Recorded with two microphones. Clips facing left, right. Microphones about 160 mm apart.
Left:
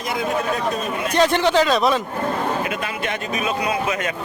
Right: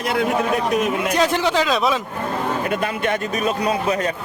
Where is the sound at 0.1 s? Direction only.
70° right (ahead or behind).